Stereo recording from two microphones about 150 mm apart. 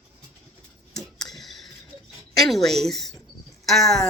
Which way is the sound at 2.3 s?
Centre (ahead or behind).